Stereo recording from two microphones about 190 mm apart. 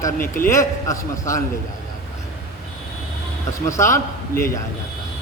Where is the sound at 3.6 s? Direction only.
15° left (ahead or behind).